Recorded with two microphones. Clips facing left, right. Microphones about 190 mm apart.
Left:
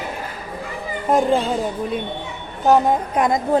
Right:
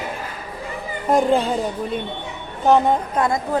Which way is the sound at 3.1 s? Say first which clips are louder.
Left 2 dB; 15° left (ahead or behind).